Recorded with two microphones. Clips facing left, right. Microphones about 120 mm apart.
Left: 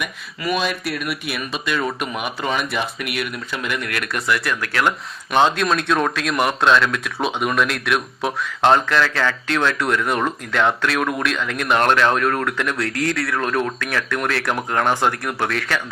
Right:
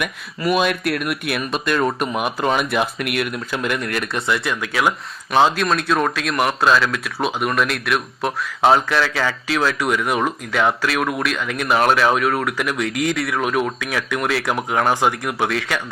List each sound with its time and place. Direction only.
0.0 s speech: centre (ahead or behind)
1.7 s speech: 45° right (ahead or behind)
2.1 s speech: centre (ahead or behind)